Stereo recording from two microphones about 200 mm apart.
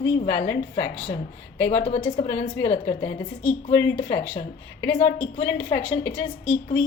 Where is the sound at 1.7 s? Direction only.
30° left (ahead or behind).